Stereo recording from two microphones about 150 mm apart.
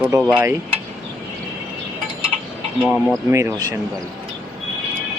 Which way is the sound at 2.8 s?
5° right (ahead or behind).